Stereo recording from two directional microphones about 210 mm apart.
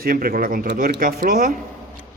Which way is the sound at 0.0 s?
45° right (ahead or behind).